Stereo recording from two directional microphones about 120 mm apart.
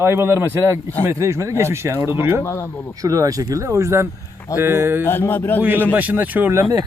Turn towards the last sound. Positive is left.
turn(degrees=-25)  # may be behind; listen again after turning